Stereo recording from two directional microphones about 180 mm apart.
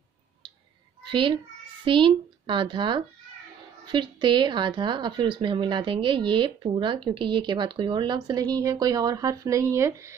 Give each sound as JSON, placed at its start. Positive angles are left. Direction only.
{"t": 1.0, "sound": "a child's voice", "side_deg": -30}